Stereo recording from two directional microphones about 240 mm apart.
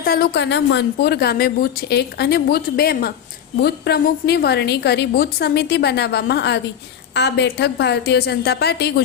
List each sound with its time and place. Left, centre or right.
0.0 s a woman's voice: left